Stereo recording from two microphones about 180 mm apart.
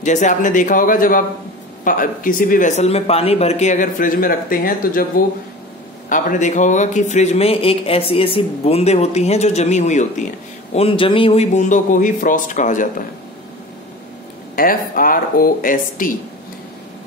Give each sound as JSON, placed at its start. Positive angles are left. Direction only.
{"t": 0.0, "sound": "speech", "side_deg": 40}
{"t": 14.5, "sound": "speech", "side_deg": 50}